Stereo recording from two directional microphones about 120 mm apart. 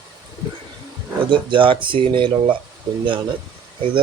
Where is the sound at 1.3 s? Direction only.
45° right (ahead or behind).